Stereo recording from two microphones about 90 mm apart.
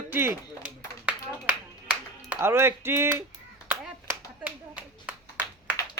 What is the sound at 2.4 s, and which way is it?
Speech, 30° right (ahead or behind).